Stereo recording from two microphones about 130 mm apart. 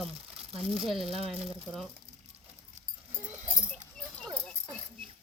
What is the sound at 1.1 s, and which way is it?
Speech, 50° right (ahead or behind).